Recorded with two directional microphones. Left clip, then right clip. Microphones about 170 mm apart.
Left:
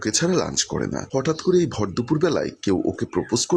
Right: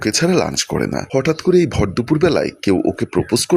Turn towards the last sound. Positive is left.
turn(degrees=-20)  # may be behind; listen again after turning